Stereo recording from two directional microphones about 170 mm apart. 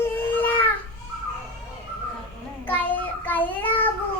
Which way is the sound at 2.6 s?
10° left (ahead or behind).